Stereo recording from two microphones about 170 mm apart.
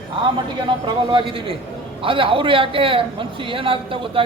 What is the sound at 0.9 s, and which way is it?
A man's voice, 30° right (ahead or behind).